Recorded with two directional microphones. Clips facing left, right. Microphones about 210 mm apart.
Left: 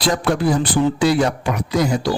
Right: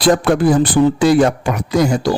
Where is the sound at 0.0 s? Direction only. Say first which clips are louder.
Right 6 dB; 50° right (ahead or behind).